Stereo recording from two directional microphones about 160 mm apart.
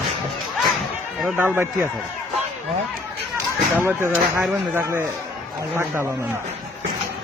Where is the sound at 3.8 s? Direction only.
15° right (ahead or behind).